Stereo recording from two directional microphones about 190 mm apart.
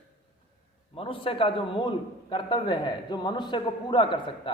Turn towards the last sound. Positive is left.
turn(degrees=25)  # may be behind; listen again after turning